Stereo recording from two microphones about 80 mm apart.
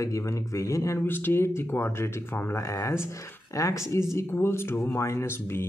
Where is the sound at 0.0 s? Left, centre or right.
Left.